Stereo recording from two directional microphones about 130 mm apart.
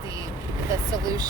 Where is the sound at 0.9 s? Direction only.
30° right (ahead or behind).